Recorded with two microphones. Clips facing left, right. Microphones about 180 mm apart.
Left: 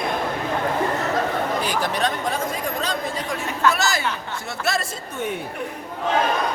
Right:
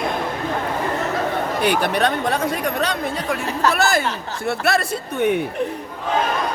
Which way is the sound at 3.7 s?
55° right (ahead or behind).